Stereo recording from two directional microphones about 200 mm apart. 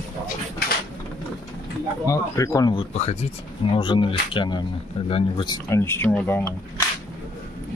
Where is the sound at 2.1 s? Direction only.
15° left (ahead or behind).